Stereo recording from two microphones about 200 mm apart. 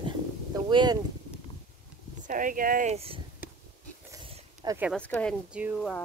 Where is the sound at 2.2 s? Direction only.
40° right (ahead or behind).